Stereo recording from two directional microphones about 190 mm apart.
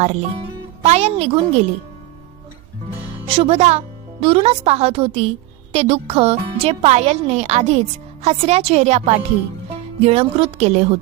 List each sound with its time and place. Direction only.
0.0 s speech: 35° right (ahead or behind)
3.2 s speech: 30° right (ahead or behind)